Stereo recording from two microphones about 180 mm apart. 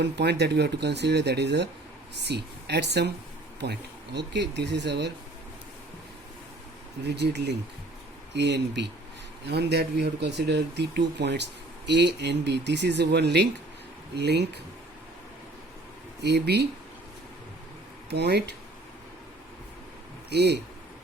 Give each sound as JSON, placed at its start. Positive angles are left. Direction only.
{"t": 0.0, "sound": "speech", "side_deg": -70}
{"t": 7.0, "sound": "speech", "side_deg": -70}
{"t": 16.2, "sound": "speech", "side_deg": -70}
{"t": 18.1, "sound": "speech", "side_deg": -65}
{"t": 20.3, "sound": "speech", "side_deg": -70}